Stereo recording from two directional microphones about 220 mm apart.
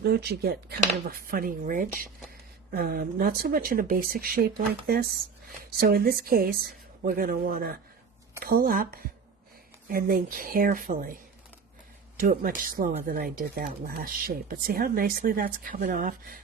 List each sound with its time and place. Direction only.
0.0 s speech: 50° right (ahead or behind)
12.2 s speech: 40° right (ahead or behind)